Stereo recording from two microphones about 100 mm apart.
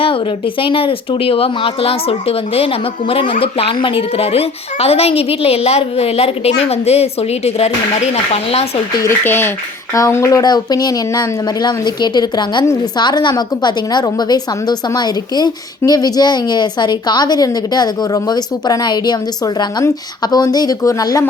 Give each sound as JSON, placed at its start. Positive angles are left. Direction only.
{"t": 0.6, "sound": "speech", "side_deg": 60}
{"t": 9.0, "sound": "a woman's voice", "side_deg": 20}
{"t": 20.2, "sound": "speech", "side_deg": 40}